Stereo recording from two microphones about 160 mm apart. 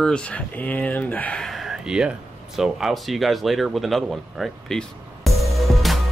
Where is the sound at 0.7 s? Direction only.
10° left (ahead or behind).